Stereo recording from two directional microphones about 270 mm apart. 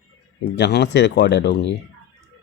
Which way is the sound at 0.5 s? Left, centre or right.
Left.